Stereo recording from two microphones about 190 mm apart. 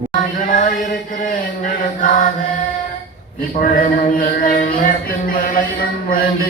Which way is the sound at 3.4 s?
45° left (ahead or behind).